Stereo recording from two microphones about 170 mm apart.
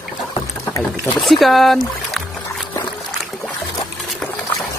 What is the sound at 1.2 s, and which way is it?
Speech, centre (ahead or behind).